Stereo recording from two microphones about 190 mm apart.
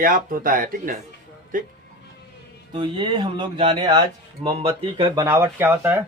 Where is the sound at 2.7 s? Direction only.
25° right (ahead or behind).